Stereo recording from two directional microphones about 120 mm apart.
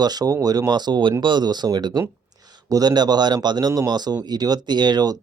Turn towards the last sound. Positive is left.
turn(degrees=-35)  # may be behind; listen again after turning